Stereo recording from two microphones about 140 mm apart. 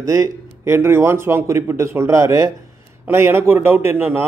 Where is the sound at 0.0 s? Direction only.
20° right (ahead or behind).